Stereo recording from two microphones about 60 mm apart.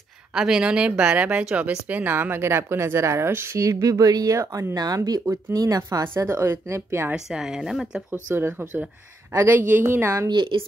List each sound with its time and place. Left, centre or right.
0.3 s speech: centre
1.9 s speech: right
3.5 s speech: right
6.1 s speech: right
7.2 s speech: centre
8.1 s speech: right